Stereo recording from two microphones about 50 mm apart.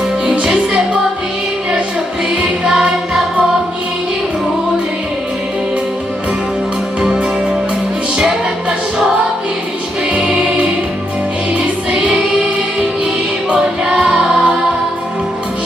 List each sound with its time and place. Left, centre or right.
0.3 s music: right
2.3 s music: centre
11.9 s choir: centre
13.5 s music: centre